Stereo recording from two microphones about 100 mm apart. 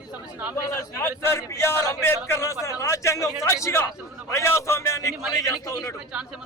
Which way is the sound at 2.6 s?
30° left (ahead or behind).